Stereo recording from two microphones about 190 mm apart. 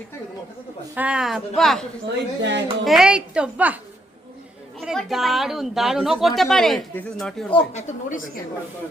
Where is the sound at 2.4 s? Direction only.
70° right (ahead or behind).